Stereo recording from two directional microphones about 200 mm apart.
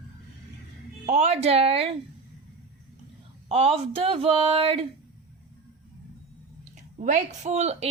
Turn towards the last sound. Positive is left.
turn(degrees=-35)  # may be behind; listen again after turning